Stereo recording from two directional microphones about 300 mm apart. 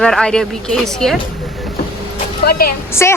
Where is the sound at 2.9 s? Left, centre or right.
Centre.